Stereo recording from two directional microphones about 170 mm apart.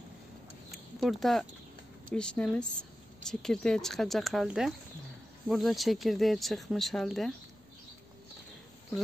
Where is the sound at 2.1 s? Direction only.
5° left (ahead or behind).